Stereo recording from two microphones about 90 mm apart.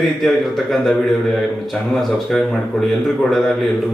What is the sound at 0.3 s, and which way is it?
Speech, 5° left (ahead or behind).